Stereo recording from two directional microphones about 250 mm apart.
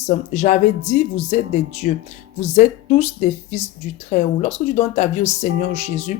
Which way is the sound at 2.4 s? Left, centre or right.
Left.